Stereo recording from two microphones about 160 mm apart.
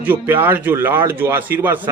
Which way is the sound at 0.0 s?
10° right (ahead or behind).